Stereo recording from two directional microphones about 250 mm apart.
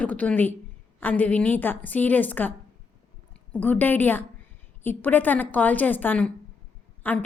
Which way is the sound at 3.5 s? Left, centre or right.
Centre.